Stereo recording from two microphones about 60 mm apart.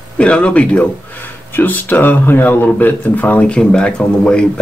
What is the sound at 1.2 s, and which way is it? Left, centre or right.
Speech, left.